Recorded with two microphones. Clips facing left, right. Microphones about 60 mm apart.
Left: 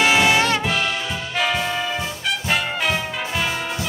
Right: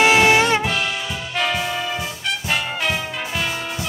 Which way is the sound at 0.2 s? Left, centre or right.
Centre.